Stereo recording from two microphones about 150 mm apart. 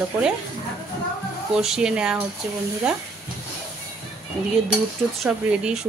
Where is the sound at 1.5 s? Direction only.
5° right (ahead or behind).